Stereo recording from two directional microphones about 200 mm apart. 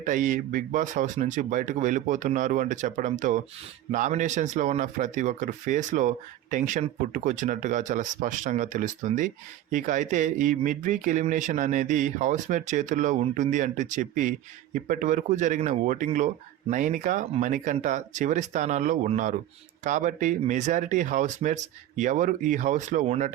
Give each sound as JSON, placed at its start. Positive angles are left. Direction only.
{"t": 0.0, "sound": "speech", "side_deg": -40}